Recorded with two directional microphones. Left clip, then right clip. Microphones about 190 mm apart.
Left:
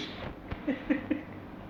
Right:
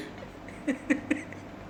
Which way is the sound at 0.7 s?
20° right (ahead or behind).